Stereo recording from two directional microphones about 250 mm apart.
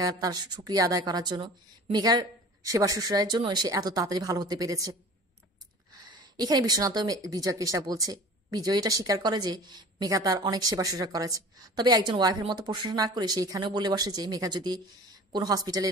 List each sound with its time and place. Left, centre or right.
0.0 s speech: centre
6.3 s speech: centre